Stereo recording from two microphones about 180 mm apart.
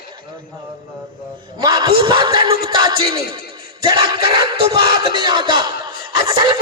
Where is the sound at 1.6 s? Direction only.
20° right (ahead or behind).